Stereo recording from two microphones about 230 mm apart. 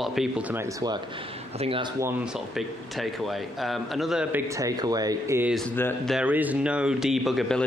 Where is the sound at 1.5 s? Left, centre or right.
Right.